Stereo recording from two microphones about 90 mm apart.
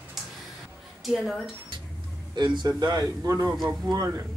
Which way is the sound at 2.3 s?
55° right (ahead or behind).